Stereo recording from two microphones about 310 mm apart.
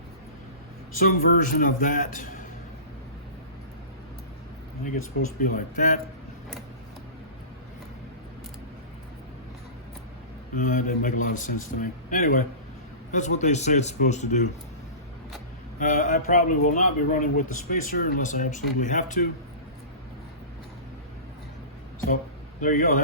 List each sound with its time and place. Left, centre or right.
1.2 s speech: left
5.4 s speech: left
10.5 s speech: left
15.8 s speech: left
22.6 s speech: left